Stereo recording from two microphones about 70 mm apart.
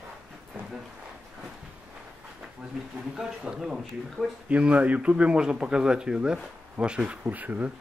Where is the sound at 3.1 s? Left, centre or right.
Centre.